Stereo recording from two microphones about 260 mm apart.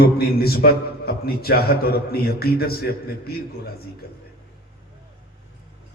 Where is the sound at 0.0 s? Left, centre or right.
Left.